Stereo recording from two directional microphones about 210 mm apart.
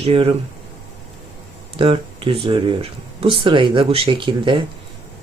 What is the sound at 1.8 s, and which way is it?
Speech, 25° right (ahead or behind).